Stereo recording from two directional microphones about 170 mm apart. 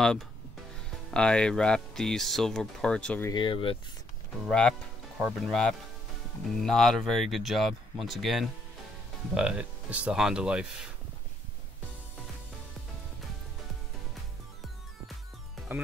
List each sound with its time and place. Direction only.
1.1 s speech: 5° left (ahead or behind)
3.3 s speech: 30° left (ahead or behind)
4.5 s speech: 5° left (ahead or behind)